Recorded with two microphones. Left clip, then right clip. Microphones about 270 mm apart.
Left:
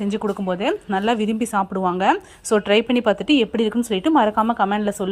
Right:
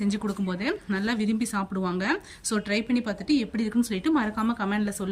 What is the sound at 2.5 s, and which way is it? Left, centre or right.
Speech, left.